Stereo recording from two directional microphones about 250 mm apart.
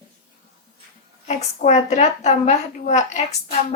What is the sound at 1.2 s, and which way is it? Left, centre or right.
A woman's voice, left.